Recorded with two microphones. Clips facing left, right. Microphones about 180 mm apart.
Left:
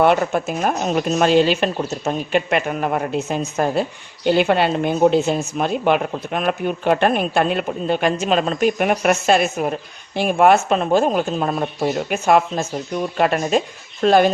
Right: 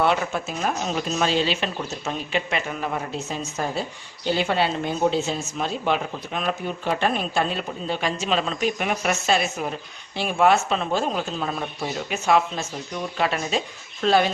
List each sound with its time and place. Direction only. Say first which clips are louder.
0.0 s speech: left 6 dB; 50° left (ahead or behind)